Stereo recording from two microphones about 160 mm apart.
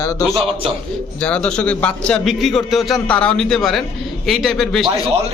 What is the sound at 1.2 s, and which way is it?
A man's voice, 5° left (ahead or behind).